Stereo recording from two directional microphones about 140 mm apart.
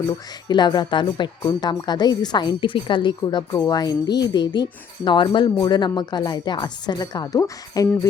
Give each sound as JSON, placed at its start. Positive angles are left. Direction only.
{"t": 0.4, "sound": "speech", "side_deg": 30}